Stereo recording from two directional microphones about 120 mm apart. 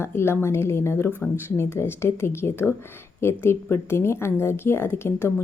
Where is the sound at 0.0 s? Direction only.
20° left (ahead or behind).